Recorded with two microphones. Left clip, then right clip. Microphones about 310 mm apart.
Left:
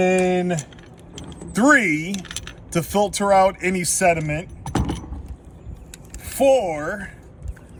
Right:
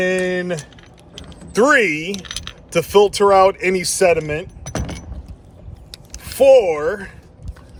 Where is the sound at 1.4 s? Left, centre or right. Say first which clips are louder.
Right 3 dB; centre.